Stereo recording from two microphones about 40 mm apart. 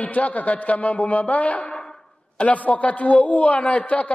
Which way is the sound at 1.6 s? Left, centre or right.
Centre.